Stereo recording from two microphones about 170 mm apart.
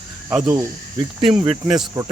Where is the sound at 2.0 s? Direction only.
20° right (ahead or behind).